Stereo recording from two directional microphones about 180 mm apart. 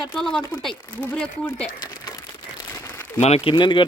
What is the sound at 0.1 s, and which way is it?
Speech, 5° left (ahead or behind).